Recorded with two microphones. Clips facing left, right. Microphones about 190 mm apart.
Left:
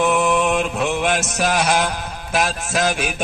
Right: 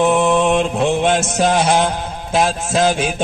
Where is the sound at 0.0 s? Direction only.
25° right (ahead or behind).